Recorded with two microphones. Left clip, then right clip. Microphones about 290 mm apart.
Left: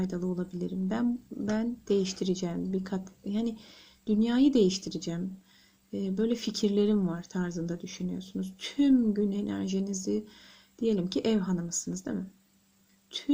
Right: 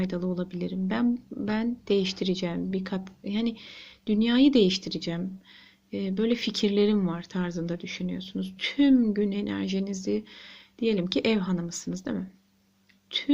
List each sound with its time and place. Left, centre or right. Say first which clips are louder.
0.0 s speech: right 3 dB; centre